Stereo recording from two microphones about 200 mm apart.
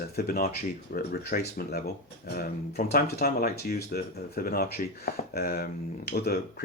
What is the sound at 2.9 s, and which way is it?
Speech, 50° left (ahead or behind).